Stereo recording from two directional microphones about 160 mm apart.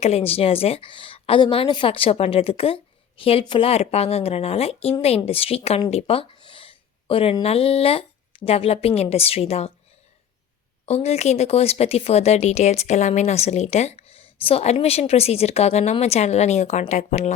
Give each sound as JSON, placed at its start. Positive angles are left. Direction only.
{"t": 0.0, "sound": "a woman's voice", "side_deg": 40}
{"t": 10.8, "sound": "speech", "side_deg": 40}